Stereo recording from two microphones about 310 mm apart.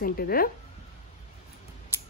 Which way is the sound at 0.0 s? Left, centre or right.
Left.